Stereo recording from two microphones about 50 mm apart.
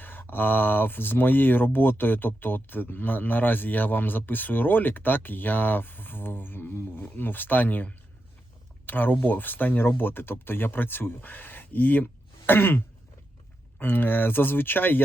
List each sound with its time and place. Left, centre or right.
0.0 s speech: left
8.9 s speech: left